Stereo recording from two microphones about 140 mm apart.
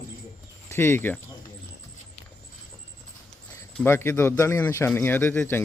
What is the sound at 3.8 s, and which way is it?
A man's voice, 15° left (ahead or behind).